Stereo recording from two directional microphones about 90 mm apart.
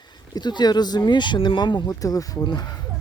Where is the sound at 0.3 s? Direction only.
50° left (ahead or behind).